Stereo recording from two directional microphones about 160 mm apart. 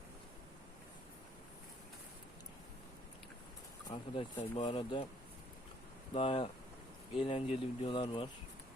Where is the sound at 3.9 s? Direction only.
45° left (ahead or behind).